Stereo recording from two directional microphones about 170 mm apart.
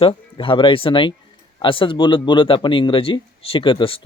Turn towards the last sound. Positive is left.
turn(degrees=30)  # may be behind; listen again after turning